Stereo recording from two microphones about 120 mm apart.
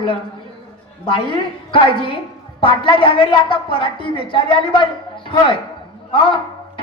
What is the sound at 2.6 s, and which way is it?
A woman's voice, 45° left (ahead or behind).